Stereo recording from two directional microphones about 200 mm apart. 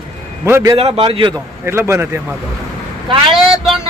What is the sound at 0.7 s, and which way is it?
Speech, 30° right (ahead or behind).